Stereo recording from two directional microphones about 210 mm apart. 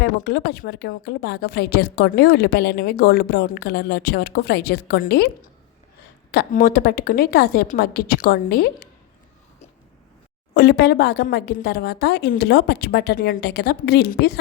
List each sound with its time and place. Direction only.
0.0 s a woman's voice: 50° left (ahead or behind)
10.5 s a woman's voice: 50° left (ahead or behind)